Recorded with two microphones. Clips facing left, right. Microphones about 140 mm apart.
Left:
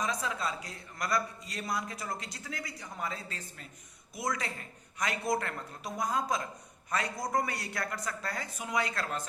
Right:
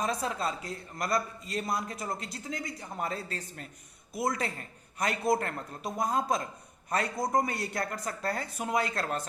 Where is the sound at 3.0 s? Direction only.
45° right (ahead or behind).